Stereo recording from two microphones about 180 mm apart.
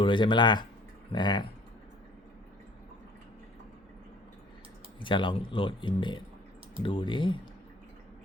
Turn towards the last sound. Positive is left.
turn(degrees=25)  # may be behind; listen again after turning